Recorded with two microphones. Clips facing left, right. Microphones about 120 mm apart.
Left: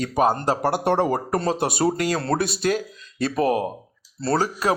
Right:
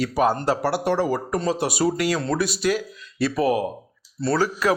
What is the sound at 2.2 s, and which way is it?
Speech, 60° left (ahead or behind).